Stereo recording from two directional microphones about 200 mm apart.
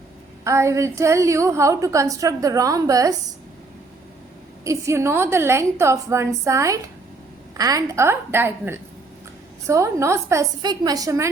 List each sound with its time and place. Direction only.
0.4 s a woman's voice: 15° right (ahead or behind)
4.6 s a woman's voice: 15° right (ahead or behind)